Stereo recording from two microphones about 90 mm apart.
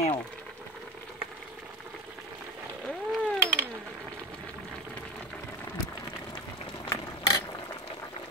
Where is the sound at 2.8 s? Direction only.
5° left (ahead or behind).